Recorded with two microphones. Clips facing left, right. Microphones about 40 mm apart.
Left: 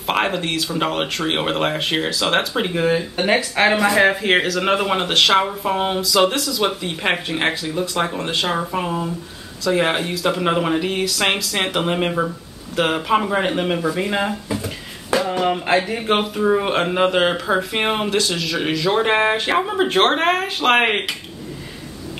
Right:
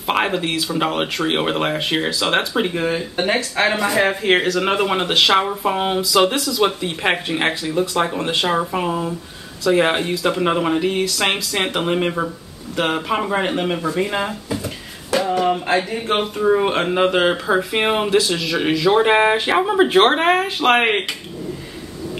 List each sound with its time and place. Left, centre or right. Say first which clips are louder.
0.0 s speech: right 1 dB; centre
15.1 s a sound: right 2 dB; centre
15.4 s speech: even; centre